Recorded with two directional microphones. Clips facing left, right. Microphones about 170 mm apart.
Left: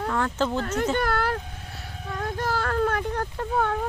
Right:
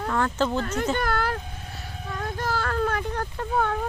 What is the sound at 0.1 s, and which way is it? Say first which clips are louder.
Speech: right 2 dB; 5° left (ahead or behind).